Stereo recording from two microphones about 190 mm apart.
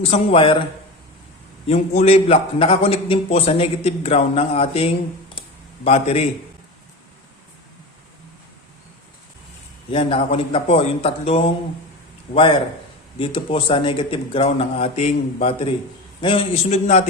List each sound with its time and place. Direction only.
0.0 s a man's voice: 30° left (ahead or behind)
1.6 s a man's voice: 35° left (ahead or behind)
9.9 s a man's voice: 30° left (ahead or behind)